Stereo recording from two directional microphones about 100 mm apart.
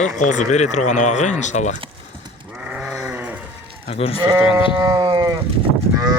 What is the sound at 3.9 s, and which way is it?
Speech, 75° left (ahead or behind).